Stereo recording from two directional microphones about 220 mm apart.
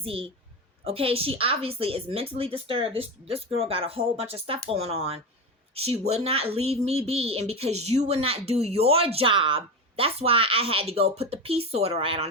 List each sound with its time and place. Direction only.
0.0 s speech: 25° right (ahead or behind)